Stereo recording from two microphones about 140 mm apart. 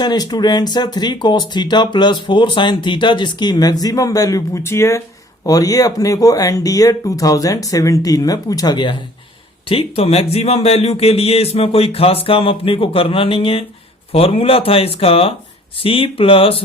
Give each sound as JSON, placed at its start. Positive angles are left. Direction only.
{"t": 0.0, "sound": "speech", "side_deg": 30}
{"t": 9.6, "sound": "speech", "side_deg": 45}